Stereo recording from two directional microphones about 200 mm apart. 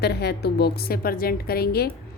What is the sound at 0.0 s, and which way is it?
A woman's voice, 55° left (ahead or behind).